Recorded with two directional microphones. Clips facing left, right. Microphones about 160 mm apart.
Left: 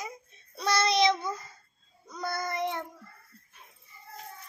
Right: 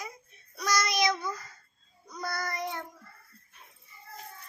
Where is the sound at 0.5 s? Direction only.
30° left (ahead or behind).